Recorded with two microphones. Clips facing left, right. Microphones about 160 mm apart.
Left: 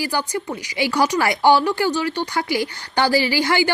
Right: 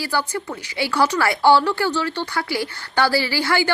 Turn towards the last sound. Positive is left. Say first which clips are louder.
# left 2 dB
turn(degrees=15)  # may be behind; listen again after turning